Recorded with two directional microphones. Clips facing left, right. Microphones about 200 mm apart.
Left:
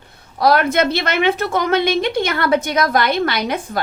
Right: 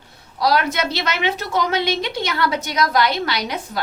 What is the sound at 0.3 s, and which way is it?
A woman's voice, 55° left (ahead or behind).